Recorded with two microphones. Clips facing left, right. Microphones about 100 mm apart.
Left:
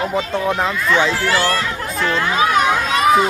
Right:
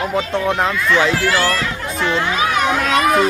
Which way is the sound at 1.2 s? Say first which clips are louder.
Even; 30° left (ahead or behind).